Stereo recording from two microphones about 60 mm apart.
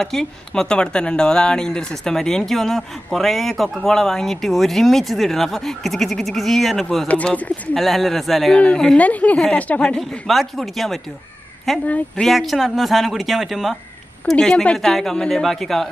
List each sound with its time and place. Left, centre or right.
0.0 s speech: centre
7.3 s a woman's voice: left
7.7 s speech: centre
8.5 s speech: centre
8.9 s a woman's voice: left
9.9 s speech: centre
14.3 s speech: centre